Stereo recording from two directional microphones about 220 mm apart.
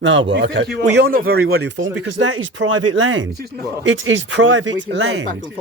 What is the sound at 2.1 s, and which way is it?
Speech, 60° right (ahead or behind).